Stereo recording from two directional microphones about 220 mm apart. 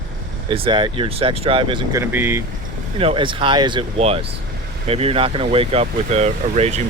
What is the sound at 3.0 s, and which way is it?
Speech, 25° right (ahead or behind).